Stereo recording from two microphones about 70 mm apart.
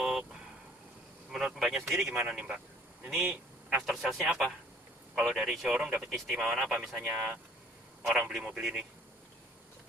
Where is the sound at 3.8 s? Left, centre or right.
Centre.